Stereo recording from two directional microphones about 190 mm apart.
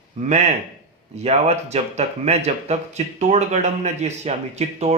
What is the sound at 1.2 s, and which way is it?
Speech, 35° right (ahead or behind).